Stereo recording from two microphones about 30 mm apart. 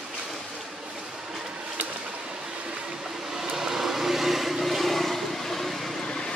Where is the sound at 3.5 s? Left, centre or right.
Centre.